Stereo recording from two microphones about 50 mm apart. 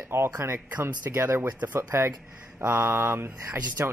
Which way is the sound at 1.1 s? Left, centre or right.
Right.